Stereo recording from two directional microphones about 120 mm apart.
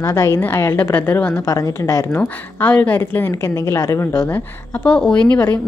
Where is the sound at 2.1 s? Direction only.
15° left (ahead or behind).